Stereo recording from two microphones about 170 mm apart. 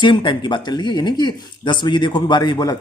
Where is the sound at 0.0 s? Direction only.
30° left (ahead or behind).